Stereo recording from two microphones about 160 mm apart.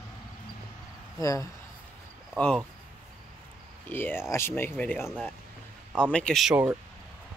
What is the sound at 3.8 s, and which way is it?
Speech, 15° left (ahead or behind).